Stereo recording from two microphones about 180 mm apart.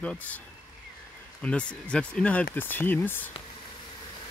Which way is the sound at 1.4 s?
5° left (ahead or behind).